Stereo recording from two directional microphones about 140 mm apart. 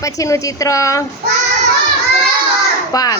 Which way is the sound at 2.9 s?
25° left (ahead or behind).